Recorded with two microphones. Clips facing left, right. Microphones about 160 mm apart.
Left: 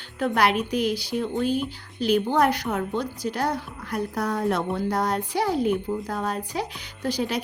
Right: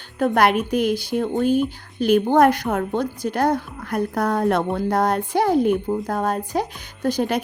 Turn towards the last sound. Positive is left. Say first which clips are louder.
# right 5 dB
turn(degrees=-50)  # may be behind; listen again after turning